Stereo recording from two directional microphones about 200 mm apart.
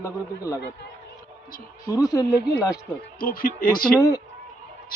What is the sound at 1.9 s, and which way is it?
Speech, 15° left (ahead or behind).